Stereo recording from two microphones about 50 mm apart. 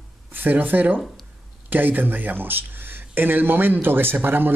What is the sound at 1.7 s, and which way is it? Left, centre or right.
A man's voice, right.